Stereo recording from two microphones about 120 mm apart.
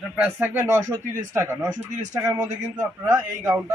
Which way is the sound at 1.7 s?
90° right.